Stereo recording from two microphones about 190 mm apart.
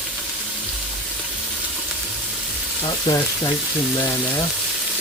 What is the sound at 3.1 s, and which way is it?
Frying, 20° left (ahead or behind).